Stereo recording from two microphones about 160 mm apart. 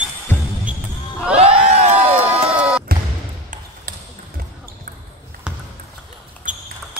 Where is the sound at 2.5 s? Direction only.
5° right (ahead or behind).